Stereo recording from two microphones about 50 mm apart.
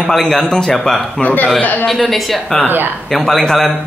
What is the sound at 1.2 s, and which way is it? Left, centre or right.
Speech, left.